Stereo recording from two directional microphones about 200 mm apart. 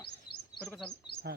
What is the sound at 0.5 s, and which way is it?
Speech, centre (ahead or behind).